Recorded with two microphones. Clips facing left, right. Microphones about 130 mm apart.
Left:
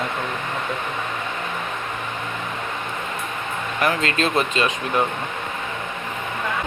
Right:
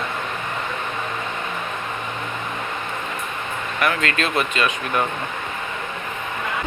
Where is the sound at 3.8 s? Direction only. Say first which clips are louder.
Left 1 dB; 30° left (ahead or behind).